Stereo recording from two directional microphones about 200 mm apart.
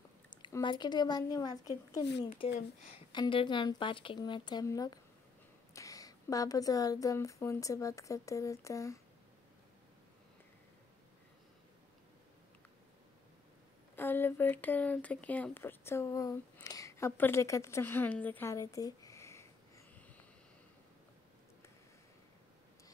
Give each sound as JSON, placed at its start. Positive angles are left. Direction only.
{"t": 0.4, "sound": "speech", "side_deg": 20}
{"t": 3.1, "sound": "speech", "side_deg": 25}
{"t": 13.9, "sound": "speech", "side_deg": 10}